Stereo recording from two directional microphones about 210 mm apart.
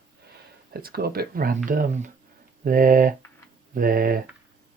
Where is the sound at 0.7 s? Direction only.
45° right (ahead or behind).